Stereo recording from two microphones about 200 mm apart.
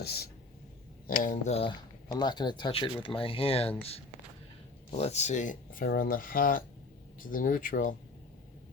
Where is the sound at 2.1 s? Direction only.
20° left (ahead or behind).